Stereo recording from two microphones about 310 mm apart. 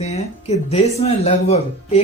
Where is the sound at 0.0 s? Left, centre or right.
Left.